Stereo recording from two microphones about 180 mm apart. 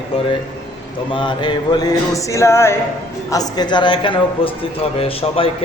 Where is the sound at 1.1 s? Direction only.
25° left (ahead or behind).